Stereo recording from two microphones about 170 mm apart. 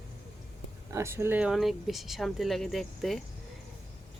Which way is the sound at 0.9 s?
15° right (ahead or behind).